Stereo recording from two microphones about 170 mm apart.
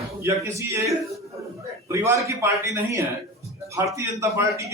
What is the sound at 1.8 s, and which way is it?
A man's voice, 15° right (ahead or behind).